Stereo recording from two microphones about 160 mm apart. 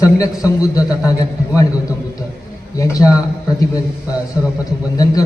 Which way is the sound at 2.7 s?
20° left (ahead or behind).